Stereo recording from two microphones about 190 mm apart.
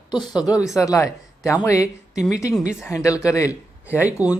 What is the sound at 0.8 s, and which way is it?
Speech, 15° left (ahead or behind).